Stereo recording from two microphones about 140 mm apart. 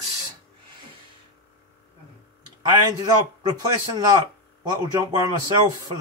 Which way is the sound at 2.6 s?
30° right (ahead or behind).